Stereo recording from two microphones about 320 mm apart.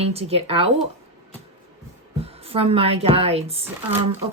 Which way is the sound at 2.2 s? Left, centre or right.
Centre.